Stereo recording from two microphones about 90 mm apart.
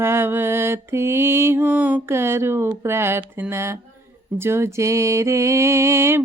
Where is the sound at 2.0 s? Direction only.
30° right (ahead or behind).